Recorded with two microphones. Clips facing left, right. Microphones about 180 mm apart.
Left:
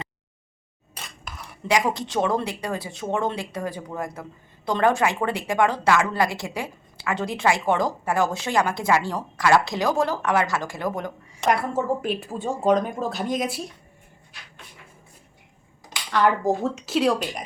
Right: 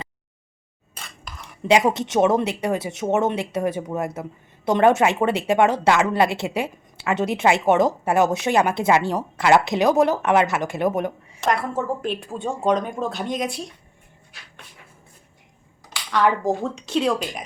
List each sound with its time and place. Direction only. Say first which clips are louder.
1.6 s speech: right 5 dB; 25° right (ahead or behind)
12.0 s speech: even; 5° left (ahead or behind)
16.1 s speech: right 1 dB; centre (ahead or behind)